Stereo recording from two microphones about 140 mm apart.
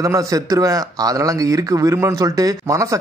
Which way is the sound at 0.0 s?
25° right (ahead or behind).